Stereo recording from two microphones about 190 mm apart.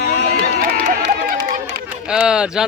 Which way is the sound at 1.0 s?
65° right (ahead or behind).